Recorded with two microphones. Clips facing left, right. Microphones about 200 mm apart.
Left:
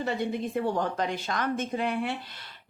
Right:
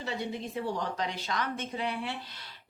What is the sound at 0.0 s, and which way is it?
A woman's voice, 55° left (ahead or behind).